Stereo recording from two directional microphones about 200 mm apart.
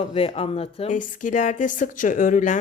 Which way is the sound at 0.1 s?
30° left (ahead or behind).